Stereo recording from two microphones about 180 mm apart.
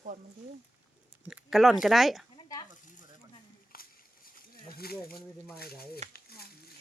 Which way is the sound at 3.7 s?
55° left (ahead or behind).